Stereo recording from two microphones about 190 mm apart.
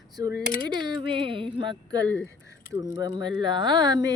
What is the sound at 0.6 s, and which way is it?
Speech, 25° right (ahead or behind).